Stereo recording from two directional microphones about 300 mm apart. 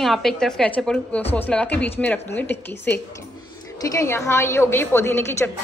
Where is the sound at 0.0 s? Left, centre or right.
Centre.